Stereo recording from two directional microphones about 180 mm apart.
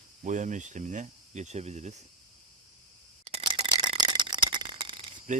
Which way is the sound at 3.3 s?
30° right (ahead or behind).